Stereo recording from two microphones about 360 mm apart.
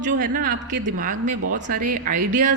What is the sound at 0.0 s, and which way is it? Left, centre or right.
A woman's voice, right.